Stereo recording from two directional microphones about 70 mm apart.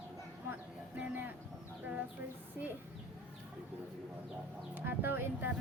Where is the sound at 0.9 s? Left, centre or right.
Right.